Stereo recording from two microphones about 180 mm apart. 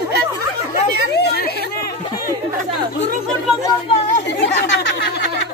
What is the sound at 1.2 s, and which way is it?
Chatter, 60° left (ahead or behind).